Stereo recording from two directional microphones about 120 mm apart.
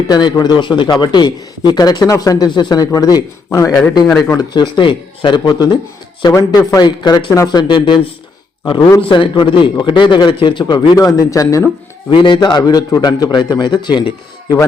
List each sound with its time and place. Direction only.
0.1 s a man's voice: 35° left (ahead or behind)
4.0 s speech: centre (ahead or behind)
4.3 s a man's voice: 35° left (ahead or behind)
9.0 s a man's voice: 45° left (ahead or behind); by 11.6 s 30° left (ahead or behind)
12.1 s a man's voice: 40° left (ahead or behind)